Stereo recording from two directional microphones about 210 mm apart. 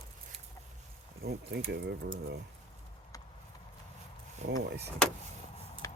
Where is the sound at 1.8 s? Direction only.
50° right (ahead or behind).